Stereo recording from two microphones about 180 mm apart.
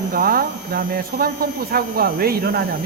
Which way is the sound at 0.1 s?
55° right (ahead or behind).